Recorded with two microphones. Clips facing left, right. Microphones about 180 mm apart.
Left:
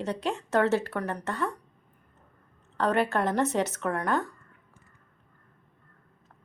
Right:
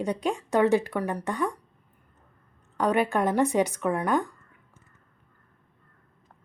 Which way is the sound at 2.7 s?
10° right (ahead or behind).